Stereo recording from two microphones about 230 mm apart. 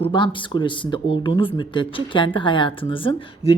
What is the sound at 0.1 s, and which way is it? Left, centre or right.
A woman's voice, left.